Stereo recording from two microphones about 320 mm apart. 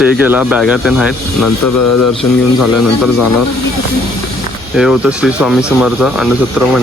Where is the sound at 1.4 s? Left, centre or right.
Left.